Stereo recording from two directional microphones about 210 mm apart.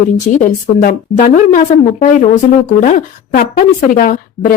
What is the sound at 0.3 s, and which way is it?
A woman's voice, 40° left (ahead or behind).